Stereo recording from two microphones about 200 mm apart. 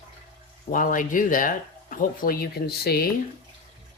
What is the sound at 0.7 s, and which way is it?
Speech, 45° left (ahead or behind).